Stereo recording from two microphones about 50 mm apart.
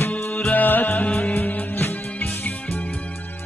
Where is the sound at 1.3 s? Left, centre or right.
Left.